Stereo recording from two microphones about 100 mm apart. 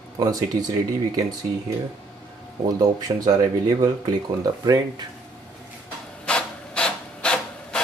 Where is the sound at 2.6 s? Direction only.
40° right (ahead or behind).